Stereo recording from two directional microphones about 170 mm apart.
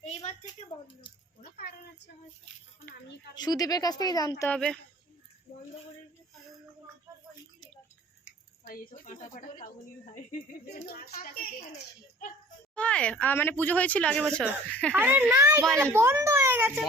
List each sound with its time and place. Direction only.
0.0 s a sound: 40° left (ahead or behind)
3.3 s speech: 25° left (ahead or behind)
4.4 s a child's voice: 5° left (ahead or behind)
8.2 s a sound: 55° left (ahead or behind)
10.8 s a woman's voice: 60° left (ahead or behind)
12.7 s speech: 5° left (ahead or behind)
14.9 s a child's voice: 10° right (ahead or behind)